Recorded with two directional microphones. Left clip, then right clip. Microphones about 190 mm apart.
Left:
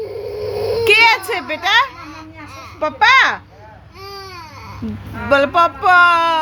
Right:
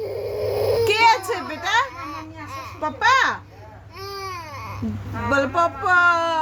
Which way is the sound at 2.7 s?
10° left (ahead or behind).